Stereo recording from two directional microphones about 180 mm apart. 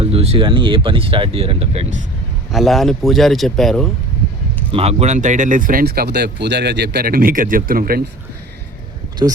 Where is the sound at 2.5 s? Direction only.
Centre (ahead or behind).